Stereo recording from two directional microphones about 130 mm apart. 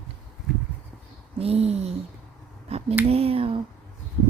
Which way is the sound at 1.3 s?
50° right (ahead or behind).